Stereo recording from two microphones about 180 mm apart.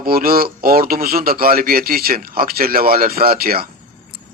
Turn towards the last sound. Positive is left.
turn(degrees=-55)  # may be behind; listen again after turning